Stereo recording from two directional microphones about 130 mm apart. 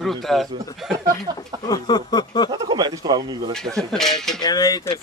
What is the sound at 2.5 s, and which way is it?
Speech, 35° right (ahead or behind).